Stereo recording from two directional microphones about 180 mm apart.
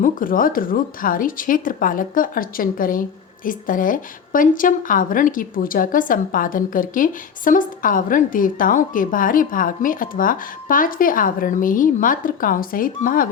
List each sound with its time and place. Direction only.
0.0 s a woman's voice: 50° left (ahead or behind)